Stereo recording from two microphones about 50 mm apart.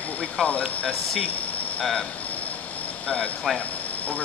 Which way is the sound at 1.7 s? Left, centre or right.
Centre.